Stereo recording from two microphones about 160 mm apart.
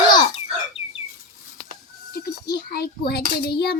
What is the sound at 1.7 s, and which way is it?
A child's voice, 70° left (ahead or behind).